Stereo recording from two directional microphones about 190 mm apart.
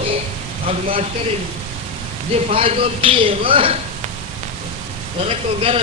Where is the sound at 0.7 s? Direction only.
30° right (ahead or behind).